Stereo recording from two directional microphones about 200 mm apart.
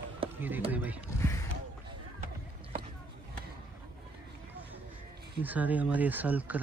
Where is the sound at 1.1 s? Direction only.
15° left (ahead or behind).